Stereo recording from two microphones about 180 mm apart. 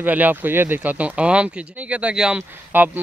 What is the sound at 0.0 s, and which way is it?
Speech, 10° right (ahead or behind).